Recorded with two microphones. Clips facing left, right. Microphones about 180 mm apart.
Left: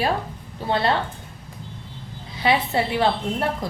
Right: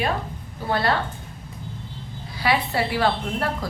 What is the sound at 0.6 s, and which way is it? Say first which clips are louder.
Speech: left 1 dB; 25° left (ahead or behind).